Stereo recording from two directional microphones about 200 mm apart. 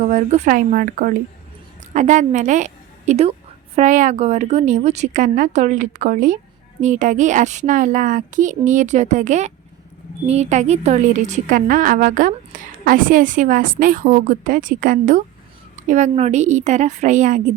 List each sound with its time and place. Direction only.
0.0 s a woman's voice: 40° right (ahead or behind)